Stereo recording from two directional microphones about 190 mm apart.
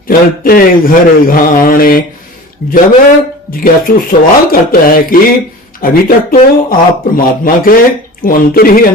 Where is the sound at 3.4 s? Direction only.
50° left (ahead or behind).